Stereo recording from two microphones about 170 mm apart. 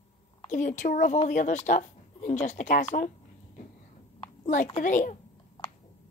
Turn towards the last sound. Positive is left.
turn(degrees=45)  # may be behind; listen again after turning